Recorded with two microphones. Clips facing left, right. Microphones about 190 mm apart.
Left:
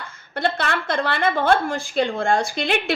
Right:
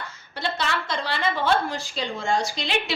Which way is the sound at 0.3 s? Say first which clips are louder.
Left 5 dB; 55° left (ahead or behind).